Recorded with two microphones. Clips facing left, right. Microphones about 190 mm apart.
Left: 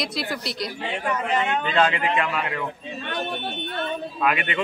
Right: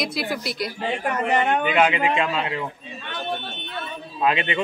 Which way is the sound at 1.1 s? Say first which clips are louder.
Right 2 dB; 50° right (ahead or behind).